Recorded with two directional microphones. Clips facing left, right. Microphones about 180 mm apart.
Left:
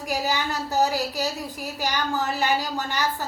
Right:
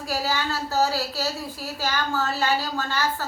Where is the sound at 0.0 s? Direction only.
15° left (ahead or behind).